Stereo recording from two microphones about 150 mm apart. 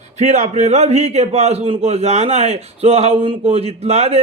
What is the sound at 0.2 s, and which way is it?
A man's voice, 50° right (ahead or behind).